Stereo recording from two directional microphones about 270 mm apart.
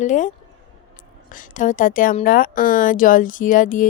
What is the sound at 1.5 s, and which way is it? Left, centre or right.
Speech, left.